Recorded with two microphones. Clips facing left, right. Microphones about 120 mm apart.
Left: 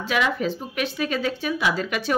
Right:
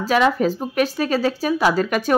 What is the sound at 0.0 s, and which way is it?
Speech, 40° right (ahead or behind).